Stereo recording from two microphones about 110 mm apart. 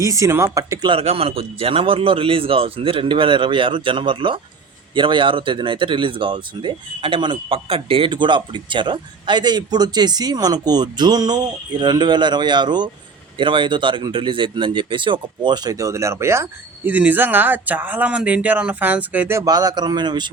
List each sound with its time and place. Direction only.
0.0 s speech: 30° right (ahead or behind)
0.9 s a man's voice: 60° right (ahead or behind); by 19.4 s 15° right (ahead or behind)
19.4 s speech: 35° right (ahead or behind)